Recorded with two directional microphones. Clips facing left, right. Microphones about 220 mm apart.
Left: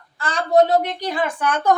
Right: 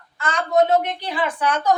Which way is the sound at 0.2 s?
35° left (ahead or behind).